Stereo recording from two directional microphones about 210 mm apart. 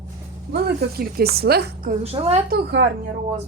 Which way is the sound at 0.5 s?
45° right (ahead or behind).